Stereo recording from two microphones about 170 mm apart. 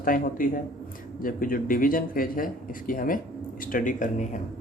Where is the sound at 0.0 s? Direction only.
55° left (ahead or behind).